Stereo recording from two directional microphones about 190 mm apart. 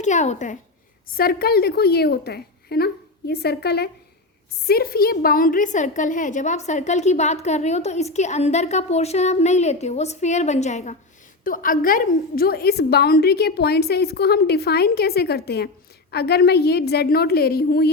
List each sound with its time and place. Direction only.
0.0 s a woman's voice: 40° left (ahead or behind)
1.1 s a woman's voice: 50° left (ahead or behind)